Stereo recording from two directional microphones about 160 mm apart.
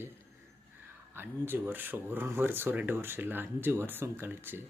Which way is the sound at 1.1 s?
15° right (ahead or behind).